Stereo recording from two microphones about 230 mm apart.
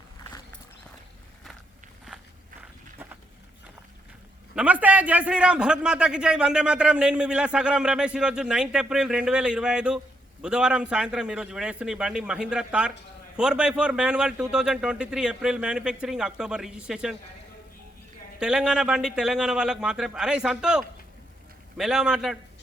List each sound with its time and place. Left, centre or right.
2.0 s walk: centre
4.5 s a man's voice: centre
18.3 s a man's voice: centre